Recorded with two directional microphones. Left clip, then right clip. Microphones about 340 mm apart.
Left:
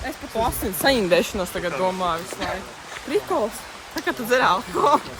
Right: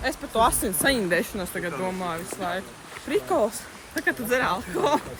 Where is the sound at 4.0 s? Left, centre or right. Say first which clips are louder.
Left 4 dB; centre.